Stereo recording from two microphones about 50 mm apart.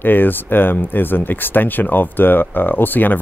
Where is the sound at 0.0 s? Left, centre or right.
Left.